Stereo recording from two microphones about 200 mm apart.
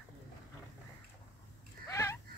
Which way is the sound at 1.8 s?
15° left (ahead or behind).